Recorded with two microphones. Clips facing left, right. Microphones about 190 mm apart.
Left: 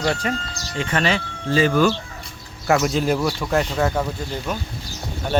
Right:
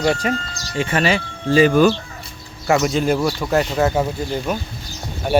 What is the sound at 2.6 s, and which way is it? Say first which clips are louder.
Speech: right 2 dB; centre (ahead or behind).